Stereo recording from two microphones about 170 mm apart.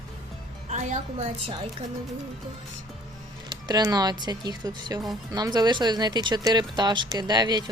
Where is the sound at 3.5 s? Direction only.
25° right (ahead or behind).